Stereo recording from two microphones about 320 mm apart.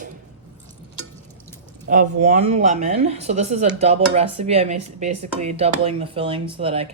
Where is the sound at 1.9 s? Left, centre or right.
Right.